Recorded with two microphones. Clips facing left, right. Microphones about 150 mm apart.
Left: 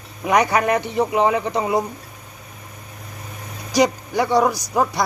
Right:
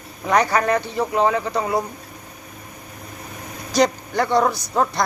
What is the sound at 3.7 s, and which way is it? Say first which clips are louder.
A man's voice: left 1 dB; 10° left (ahead or behind).